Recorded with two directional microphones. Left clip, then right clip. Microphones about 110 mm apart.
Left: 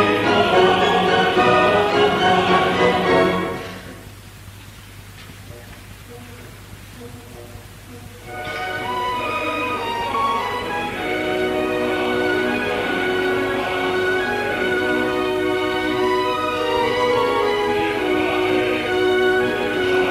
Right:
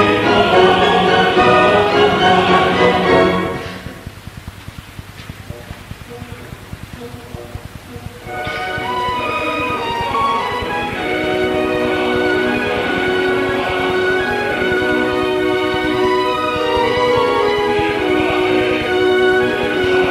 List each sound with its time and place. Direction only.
0.0 s music: 30° right (ahead or behind)
8.3 s music: 30° right (ahead or behind)